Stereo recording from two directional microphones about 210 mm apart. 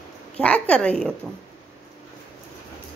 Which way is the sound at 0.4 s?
5° left (ahead or behind).